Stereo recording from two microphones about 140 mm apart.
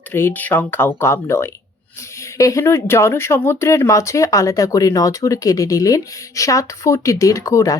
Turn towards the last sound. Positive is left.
turn(degrees=25)  # may be behind; listen again after turning